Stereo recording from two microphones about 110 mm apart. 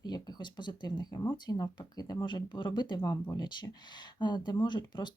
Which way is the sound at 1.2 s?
25° left (ahead or behind).